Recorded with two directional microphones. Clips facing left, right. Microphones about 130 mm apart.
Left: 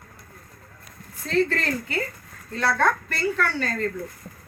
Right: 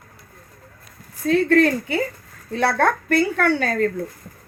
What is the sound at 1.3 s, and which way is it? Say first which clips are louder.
A woman's voice: right 7 dB; 60° right (ahead or behind).